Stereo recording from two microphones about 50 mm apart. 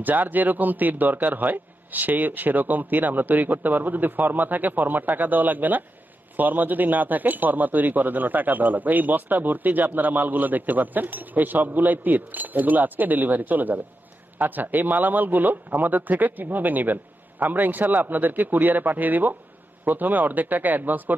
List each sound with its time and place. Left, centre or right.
0.0 s speech: right